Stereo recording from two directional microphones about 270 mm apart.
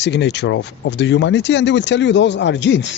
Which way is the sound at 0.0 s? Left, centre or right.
Left.